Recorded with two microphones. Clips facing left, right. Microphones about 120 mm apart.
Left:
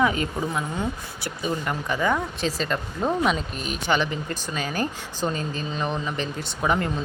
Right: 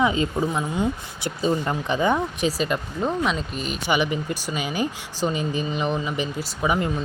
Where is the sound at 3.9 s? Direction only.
10° right (ahead or behind).